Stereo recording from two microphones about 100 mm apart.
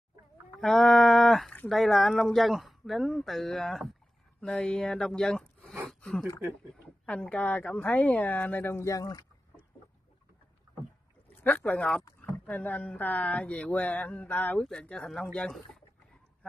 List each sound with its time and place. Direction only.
0.6 s speech: 5° left (ahead or behind); by 9.2 s 35° left (ahead or behind)
11.4 s speech: 15° left (ahead or behind)